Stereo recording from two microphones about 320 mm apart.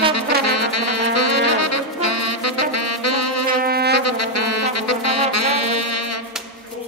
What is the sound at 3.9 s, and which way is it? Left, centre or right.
Music, left.